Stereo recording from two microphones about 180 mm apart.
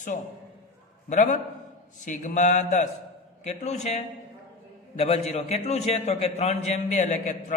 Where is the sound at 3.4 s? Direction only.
40° left (ahead or behind).